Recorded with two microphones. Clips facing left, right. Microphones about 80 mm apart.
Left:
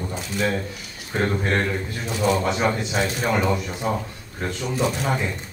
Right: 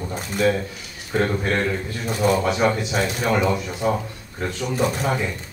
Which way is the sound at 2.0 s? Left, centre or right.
Right.